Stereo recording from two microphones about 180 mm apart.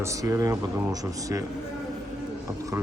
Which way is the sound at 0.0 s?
20° right (ahead or behind).